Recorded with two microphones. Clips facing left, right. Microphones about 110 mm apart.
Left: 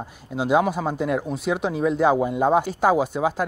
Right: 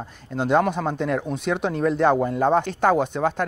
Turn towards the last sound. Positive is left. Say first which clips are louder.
# even
turn(degrees=5)  # may be behind; listen again after turning